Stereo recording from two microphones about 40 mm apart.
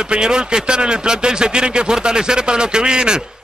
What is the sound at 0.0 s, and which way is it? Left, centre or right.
A man's voice, centre.